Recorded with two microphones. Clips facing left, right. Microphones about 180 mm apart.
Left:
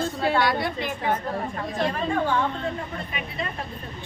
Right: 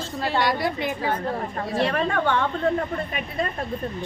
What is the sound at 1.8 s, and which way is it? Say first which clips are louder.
Speech: right 1 dB; 70° right (ahead or behind).